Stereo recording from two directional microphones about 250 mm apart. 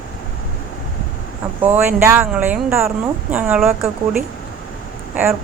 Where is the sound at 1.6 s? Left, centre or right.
Centre.